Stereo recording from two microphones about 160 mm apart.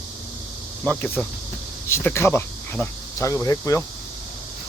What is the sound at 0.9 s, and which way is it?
Speech, 10° left (ahead or behind).